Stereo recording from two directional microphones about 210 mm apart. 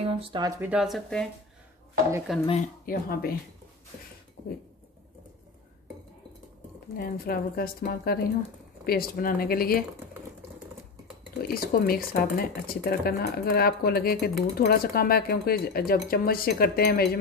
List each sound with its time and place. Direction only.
0.0 s a sound: 25° right (ahead or behind)
0.6 s speech: 5° right (ahead or behind)
2.8 s speech: 45° left (ahead or behind)
7.0 s speech: 45° left (ahead or behind)
11.4 s speech: 45° left (ahead or behind)